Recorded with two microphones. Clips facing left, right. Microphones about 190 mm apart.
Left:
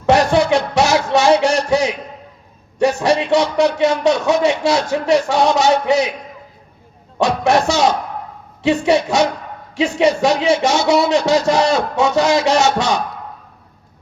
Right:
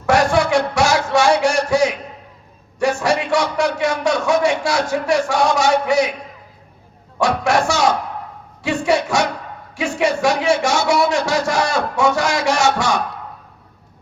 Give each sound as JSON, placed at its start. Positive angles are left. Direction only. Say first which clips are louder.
{"t": 0.0, "sound": "a sound", "louder": "left 2 dB", "side_deg": 20}
{"t": 2.8, "sound": "a man's voice", "louder": "left 3 dB", "side_deg": 20}
{"t": 7.4, "sound": "a man's voice", "louder": "left 3 dB", "side_deg": 20}